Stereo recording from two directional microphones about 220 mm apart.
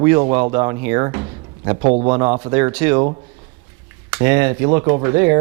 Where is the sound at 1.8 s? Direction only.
30° right (ahead or behind).